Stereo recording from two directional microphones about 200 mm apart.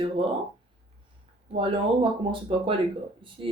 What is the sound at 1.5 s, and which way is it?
Speech, 25° right (ahead or behind).